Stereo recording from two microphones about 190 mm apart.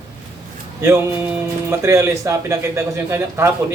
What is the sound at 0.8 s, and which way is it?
A man's voice, 10° right (ahead or behind).